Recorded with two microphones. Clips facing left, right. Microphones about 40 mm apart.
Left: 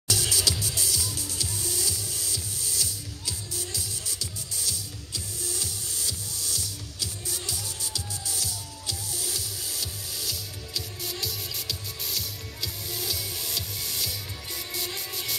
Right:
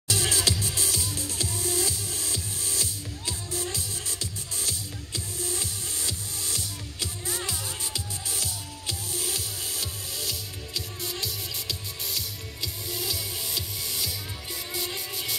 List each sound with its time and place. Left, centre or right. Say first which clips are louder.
0.1 s music: right 1 dB; right
10.1 s music: right 1 dB; centre